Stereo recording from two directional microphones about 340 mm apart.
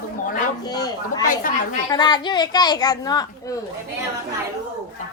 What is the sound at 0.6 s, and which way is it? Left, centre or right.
Speech, centre.